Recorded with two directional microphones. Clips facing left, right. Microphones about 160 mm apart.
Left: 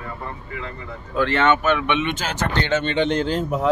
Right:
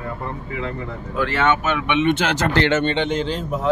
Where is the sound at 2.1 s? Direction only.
75° right (ahead or behind).